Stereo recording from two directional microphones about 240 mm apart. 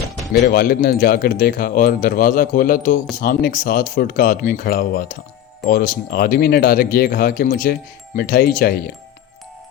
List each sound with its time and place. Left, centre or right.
0.5 s speech: left